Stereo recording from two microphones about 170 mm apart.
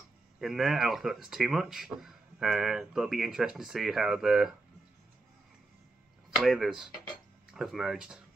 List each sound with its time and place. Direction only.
0.4 s speech: centre (ahead or behind)
6.4 s speech: centre (ahead or behind)